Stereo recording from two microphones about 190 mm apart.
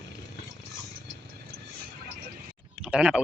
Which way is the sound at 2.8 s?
5° right (ahead or behind).